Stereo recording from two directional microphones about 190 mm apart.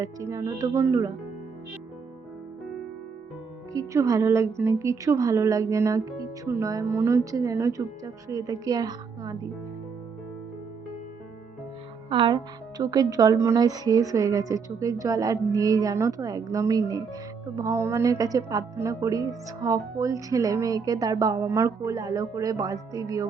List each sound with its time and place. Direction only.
0.0 s a woman's voice: 15° right (ahead or behind)
3.7 s a woman's voice: 20° right (ahead or behind)
12.0 s a woman's voice: 25° right (ahead or behind)